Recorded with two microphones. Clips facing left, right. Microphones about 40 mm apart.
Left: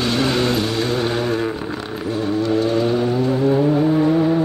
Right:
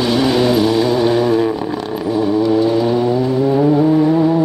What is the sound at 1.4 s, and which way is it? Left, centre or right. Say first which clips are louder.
Vehicle: right 6 dB; centre.